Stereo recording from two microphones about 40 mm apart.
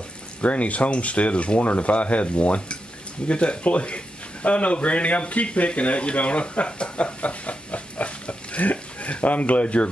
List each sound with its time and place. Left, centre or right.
0.4 s speech: left